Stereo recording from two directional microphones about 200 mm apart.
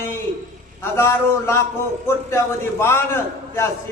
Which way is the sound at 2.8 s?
10° left (ahead or behind).